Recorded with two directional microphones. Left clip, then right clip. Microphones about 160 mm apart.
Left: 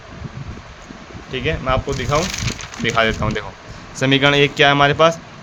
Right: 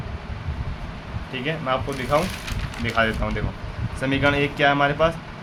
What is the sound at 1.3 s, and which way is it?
Speech, 45° left (ahead or behind).